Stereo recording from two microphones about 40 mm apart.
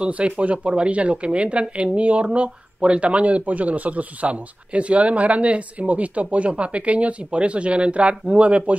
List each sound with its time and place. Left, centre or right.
0.0 s speech: right